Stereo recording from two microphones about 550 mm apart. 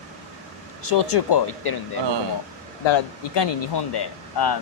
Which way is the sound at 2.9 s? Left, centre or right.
Left.